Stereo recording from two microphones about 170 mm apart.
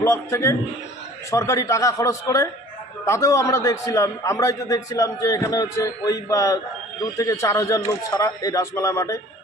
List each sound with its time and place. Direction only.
0.0 s a man's voice: 15° left (ahead or behind)